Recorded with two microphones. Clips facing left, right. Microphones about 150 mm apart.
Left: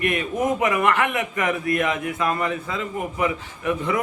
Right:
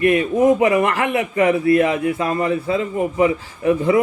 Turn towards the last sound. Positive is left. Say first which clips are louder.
# right 8 dB
turn(degrees=-30)  # may be behind; listen again after turning